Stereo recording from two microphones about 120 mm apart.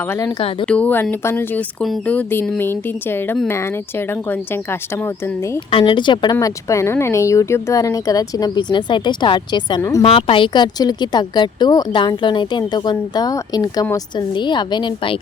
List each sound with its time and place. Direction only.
0.0 s speech: 20° left (ahead or behind)
0.6 s speech: 10° left (ahead or behind)
5.5 s a woman's voice: 45° left (ahead or behind)
6.4 s a woman's voice: 25° left (ahead or behind); by 15.2 s 45° left (ahead or behind)